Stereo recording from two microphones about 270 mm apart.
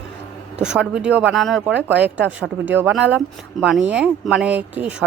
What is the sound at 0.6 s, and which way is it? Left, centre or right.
Speech, centre.